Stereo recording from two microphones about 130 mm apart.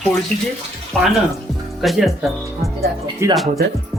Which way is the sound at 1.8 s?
Centre (ahead or behind).